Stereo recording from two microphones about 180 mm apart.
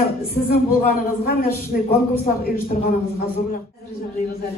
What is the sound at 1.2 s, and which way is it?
A man's voice, 55° left (ahead or behind).